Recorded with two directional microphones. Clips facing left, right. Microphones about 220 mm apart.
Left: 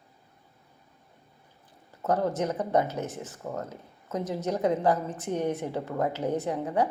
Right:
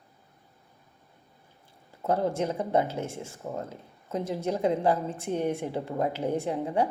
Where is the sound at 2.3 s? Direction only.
25° right (ahead or behind).